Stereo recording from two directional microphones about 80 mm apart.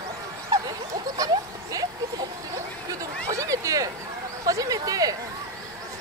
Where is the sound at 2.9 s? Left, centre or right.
Right.